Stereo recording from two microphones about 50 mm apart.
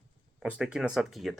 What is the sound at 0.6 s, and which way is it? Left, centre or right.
Speech, centre.